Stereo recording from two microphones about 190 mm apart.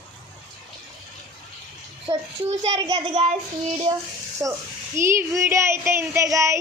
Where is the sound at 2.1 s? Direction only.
20° right (ahead or behind).